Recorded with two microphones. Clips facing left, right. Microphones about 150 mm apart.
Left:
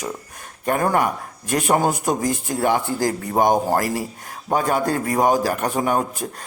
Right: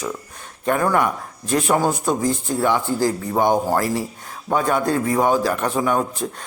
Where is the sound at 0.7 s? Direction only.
40° left (ahead or behind).